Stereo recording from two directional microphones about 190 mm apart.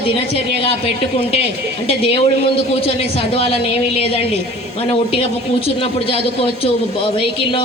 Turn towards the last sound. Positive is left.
turn(degrees=30)  # may be behind; listen again after turning